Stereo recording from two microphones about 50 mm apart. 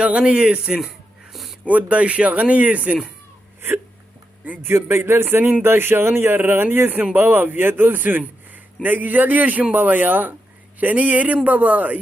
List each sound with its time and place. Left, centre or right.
0.0 s speech: right
1.3 s a sound: centre
1.6 s speech: right
4.6 s a man's voice: right